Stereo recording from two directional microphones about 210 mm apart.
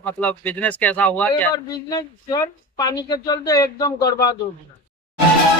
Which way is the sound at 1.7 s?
20° left (ahead or behind).